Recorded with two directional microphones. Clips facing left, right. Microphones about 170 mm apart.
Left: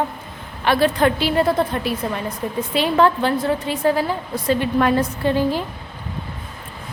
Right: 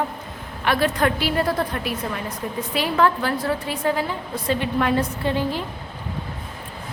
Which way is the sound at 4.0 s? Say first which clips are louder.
Left 4 dB; 40° left (ahead or behind).